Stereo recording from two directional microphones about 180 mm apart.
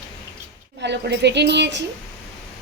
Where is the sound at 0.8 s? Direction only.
70° right (ahead or behind).